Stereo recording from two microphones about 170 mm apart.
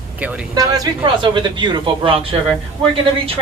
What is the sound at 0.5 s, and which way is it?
A woman's voice, 20° right (ahead or behind).